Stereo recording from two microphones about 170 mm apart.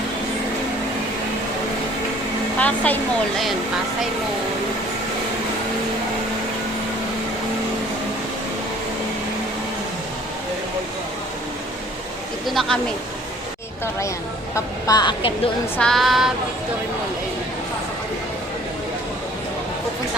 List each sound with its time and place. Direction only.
2.6 s a woman's voice: 10° left (ahead or behind)
12.5 s female singing: centre (ahead or behind)
14.5 s a woman's voice: 20° left (ahead or behind)
15.8 s female singing: centre (ahead or behind)